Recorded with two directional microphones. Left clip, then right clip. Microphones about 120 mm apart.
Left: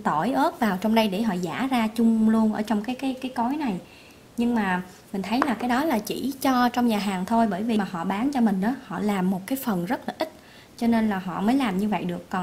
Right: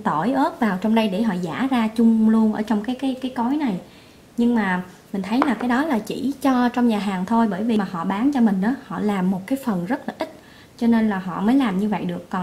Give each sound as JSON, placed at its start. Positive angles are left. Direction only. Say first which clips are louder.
{"t": 0.0, "sound": "a woman's voice", "louder": "right 2 dB", "side_deg": 30}